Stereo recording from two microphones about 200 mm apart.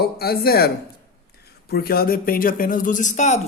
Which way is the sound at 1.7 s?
50° left (ahead or behind).